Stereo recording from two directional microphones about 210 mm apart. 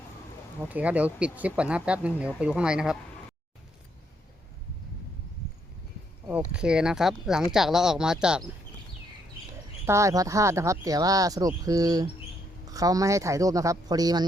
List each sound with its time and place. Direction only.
0.6 s speech: 5° right (ahead or behind)
6.5 s speech: 5° right (ahead or behind)
9.8 s speech: 15° right (ahead or behind)